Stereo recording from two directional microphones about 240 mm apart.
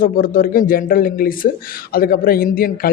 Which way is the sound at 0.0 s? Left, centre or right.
Left.